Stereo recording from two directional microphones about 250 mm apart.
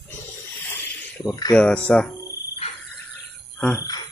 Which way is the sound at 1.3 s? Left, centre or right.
Centre.